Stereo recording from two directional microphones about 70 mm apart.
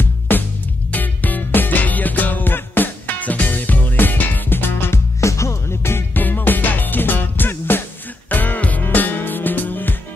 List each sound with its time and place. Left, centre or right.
0.3 s music: left
5.2 s music: left